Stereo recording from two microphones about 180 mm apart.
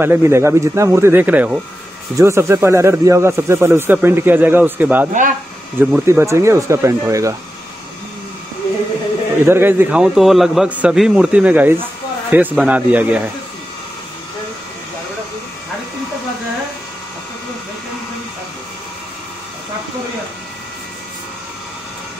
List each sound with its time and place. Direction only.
0.0 s speech: 10° right (ahead or behind)
9.4 s a man's voice: 10° right (ahead or behind)